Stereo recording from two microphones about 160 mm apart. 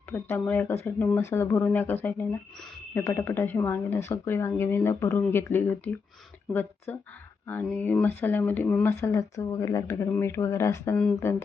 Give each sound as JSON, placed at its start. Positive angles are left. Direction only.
{"t": 0.1, "sound": "speech", "side_deg": 15}